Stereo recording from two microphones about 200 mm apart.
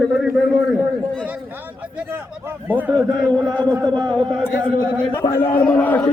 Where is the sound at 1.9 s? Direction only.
10° right (ahead or behind).